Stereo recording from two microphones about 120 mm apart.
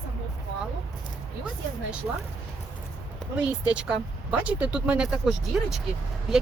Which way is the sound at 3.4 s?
10° right (ahead or behind).